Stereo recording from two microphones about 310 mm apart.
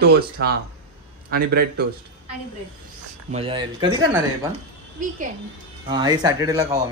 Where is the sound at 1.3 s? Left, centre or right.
Right.